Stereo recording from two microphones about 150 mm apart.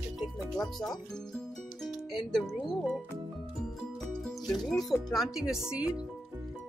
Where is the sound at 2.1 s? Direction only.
Centre (ahead or behind).